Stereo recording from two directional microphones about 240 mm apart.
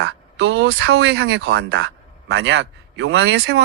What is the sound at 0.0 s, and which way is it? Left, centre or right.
Speech, right.